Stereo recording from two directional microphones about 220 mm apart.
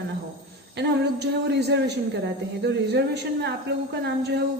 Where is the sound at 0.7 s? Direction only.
50° right (ahead or behind).